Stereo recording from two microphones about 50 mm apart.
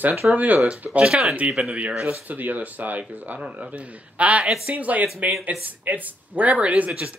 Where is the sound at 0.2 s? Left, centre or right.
Centre.